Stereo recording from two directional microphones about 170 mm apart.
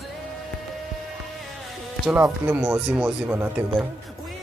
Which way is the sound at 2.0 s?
10° right (ahead or behind).